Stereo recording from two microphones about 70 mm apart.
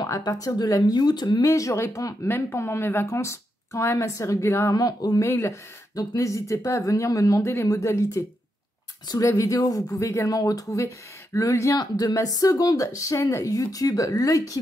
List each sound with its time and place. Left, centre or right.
0.2 s speech: left
1.4 s speech: left
2.2 s speech: left
4.7 s speech: left
5.2 s speech: left
5.9 s speech: left
9.2 s speech: left
11.7 s speech: left